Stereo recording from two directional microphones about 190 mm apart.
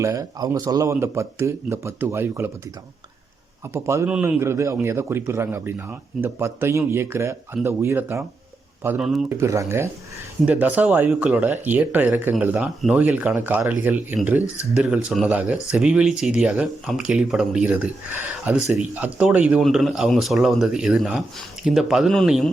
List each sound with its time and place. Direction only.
0.0 s a man's voice: 20° right (ahead or behind)
3.7 s a man's voice: 15° right (ahead or behind)
9.4 s a man's voice: 15° right (ahead or behind); by 22.4 s centre (ahead or behind)